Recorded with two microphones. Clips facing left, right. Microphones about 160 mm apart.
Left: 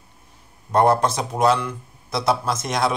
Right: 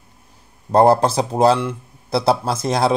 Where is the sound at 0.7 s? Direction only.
30° right (ahead or behind).